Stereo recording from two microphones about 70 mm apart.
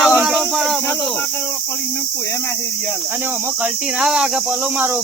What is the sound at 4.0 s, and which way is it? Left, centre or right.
Cricket, centre.